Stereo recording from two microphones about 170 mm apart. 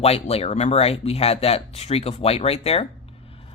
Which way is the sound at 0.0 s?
35° left (ahead or behind).